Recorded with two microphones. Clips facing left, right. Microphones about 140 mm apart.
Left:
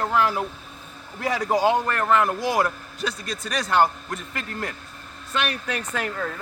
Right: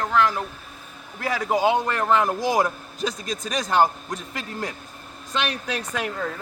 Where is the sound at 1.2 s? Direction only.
Centre (ahead or behind).